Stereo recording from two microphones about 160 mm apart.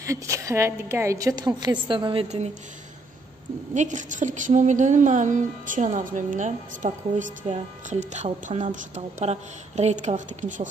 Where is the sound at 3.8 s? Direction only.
50° right (ahead or behind).